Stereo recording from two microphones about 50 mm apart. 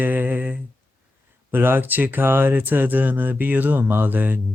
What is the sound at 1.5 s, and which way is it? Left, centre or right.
Speech, right.